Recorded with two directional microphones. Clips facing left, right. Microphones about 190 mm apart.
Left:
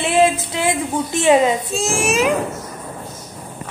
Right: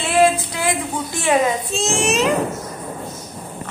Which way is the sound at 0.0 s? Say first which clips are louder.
Even; 20° left (ahead or behind).